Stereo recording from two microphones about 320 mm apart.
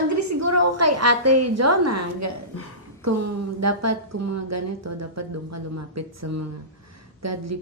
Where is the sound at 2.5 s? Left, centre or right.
Left.